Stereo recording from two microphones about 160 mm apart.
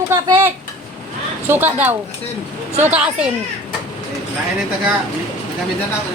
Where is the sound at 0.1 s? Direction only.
15° right (ahead or behind).